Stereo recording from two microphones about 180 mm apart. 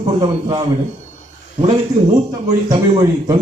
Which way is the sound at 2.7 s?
20° right (ahead or behind).